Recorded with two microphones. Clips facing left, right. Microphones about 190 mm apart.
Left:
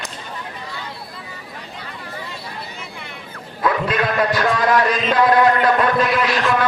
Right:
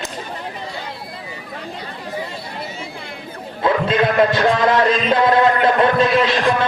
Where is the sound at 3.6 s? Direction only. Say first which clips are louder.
Right 3 dB; 25° right (ahead or behind).